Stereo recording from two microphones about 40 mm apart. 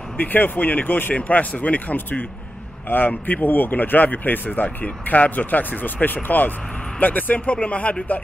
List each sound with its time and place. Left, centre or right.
0.2 s speech: left
1.1 s speech: left